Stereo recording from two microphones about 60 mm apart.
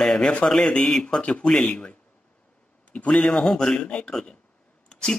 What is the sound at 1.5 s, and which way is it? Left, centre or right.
Speech, centre.